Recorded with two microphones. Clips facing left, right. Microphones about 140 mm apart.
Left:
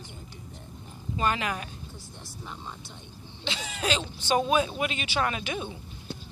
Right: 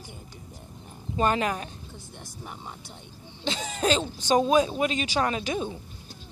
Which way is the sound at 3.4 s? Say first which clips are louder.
Right 5 dB; 45° right (ahead or behind).